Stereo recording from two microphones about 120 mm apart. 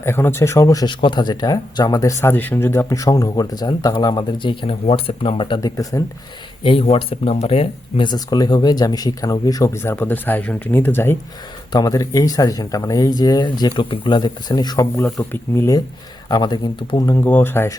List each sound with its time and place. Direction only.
0.0 s speech: 20° left (ahead or behind)
2.3 s speech: 15° left (ahead or behind); by 5.5 s 45° left (ahead or behind)
5.5 s speech: 30° left (ahead or behind)
6.6 s speech: 45° left (ahead or behind)
8.0 s speech: 35° left (ahead or behind); by 11.2 s 20° left (ahead or behind)
11.7 s speech: 30° left (ahead or behind)
14.9 s speech: 20° left (ahead or behind)
16.3 s speech: 35° left (ahead or behind)
17.1 s speech: 20° left (ahead or behind)